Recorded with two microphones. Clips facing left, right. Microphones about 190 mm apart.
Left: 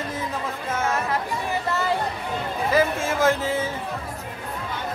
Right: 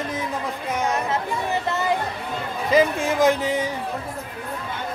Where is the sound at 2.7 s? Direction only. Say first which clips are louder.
Right 3 dB; 20° right (ahead or behind).